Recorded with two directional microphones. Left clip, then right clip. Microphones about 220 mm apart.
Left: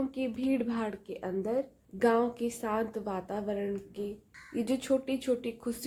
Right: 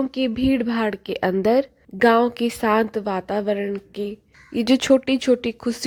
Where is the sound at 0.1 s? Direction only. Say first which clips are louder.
Right 11 dB; 30° right (ahead or behind).